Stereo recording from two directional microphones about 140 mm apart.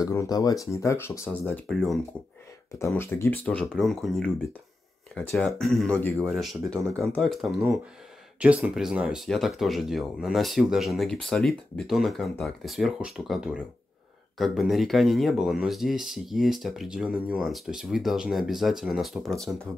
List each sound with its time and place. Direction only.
0.0 s speech: 25° left (ahead or behind)
1.7 s speech: centre (ahead or behind)
3.0 s speech: 15° left (ahead or behind)
3.4 s speech: 5° left (ahead or behind)
5.4 s speech: centre (ahead or behind)
8.4 s speech: 10° right (ahead or behind)